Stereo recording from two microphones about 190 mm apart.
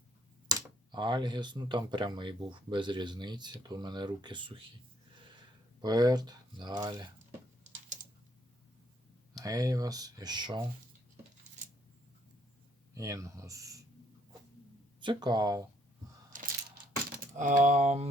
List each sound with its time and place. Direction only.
0.4 s speech: 25° right (ahead or behind)
5.8 s speech: 20° right (ahead or behind)
9.4 s speech: 20° right (ahead or behind)
12.9 s speech: 15° right (ahead or behind)
15.0 s speech: 25° right (ahead or behind)
16.3 s crushing: 40° right (ahead or behind)
17.3 s speech: 40° right (ahead or behind)